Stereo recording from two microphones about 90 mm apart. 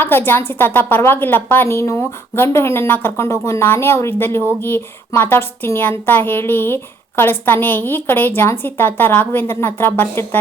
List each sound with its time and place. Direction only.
0.0 s a woman's voice: 25° left (ahead or behind)